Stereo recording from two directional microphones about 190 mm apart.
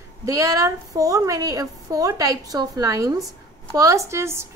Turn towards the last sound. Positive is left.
turn(degrees=-15)  # may be behind; listen again after turning